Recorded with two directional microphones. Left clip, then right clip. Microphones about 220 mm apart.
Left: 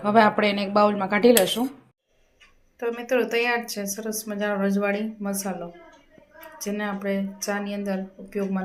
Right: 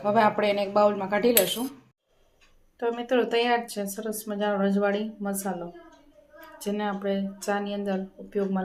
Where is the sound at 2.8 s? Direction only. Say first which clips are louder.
Left 1 dB; 5° right (ahead or behind).